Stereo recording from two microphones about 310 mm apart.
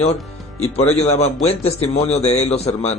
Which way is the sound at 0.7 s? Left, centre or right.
Centre.